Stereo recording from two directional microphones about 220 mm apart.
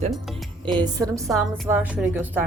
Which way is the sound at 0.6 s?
20° right (ahead or behind).